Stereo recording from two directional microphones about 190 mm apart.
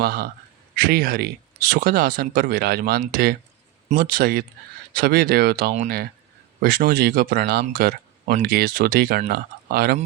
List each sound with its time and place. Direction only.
0.0 s speech: 55° right (ahead or behind)